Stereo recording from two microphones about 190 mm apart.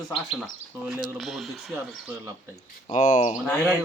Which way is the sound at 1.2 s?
Centre (ahead or behind).